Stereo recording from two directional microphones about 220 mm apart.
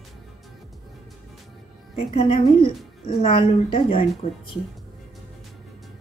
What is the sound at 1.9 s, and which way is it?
A woman's voice, 25° left (ahead or behind).